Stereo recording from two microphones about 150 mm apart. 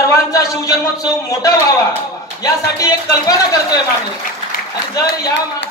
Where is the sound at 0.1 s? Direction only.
20° left (ahead or behind).